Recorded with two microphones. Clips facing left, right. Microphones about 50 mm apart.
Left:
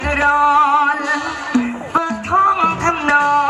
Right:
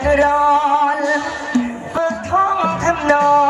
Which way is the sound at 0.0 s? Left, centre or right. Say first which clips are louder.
Right 1 dB; left.